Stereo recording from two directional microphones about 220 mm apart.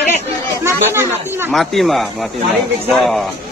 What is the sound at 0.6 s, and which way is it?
Speech, 10° right (ahead or behind).